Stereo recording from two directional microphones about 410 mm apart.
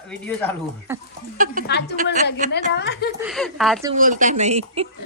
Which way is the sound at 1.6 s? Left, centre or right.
Left.